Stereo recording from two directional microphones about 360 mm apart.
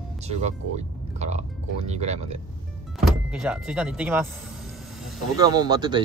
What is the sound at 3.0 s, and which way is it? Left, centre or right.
Speech, centre.